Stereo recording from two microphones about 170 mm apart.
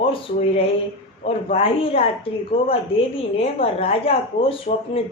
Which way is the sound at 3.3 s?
35° left (ahead or behind).